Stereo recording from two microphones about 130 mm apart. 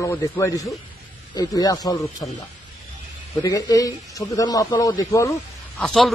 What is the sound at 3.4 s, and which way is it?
Speech, 25° left (ahead or behind).